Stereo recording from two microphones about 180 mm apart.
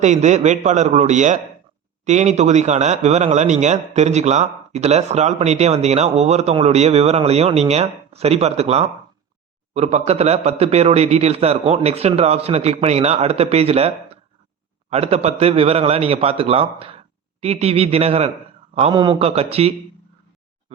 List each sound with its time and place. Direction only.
0.0 s a man's voice: 40° right (ahead or behind)